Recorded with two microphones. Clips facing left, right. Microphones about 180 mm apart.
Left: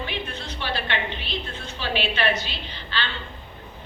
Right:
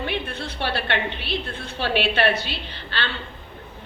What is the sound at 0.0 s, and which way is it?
A woman's voice, 60° right (ahead or behind).